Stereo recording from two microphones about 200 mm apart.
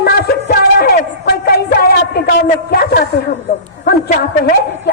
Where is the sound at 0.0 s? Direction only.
50° left (ahead or behind).